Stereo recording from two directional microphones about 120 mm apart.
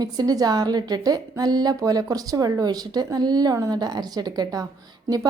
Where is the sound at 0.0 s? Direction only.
30° right (ahead or behind).